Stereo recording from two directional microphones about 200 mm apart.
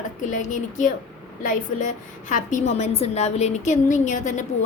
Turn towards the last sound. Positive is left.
turn(degrees=35)  # may be behind; listen again after turning